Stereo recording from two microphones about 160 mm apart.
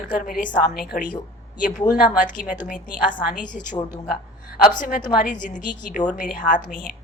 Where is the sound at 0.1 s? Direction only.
60° left (ahead or behind).